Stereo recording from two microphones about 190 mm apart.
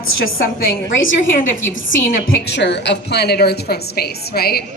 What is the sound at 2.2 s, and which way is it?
A woman's voice, 60° left (ahead or behind).